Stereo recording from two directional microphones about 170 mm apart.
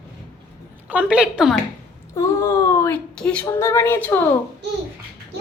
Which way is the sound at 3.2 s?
5° left (ahead or behind).